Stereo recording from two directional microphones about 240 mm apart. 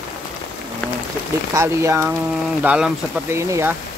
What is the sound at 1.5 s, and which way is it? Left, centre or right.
Speech, centre.